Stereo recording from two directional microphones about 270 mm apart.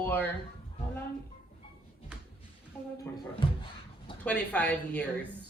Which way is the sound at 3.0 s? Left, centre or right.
Centre.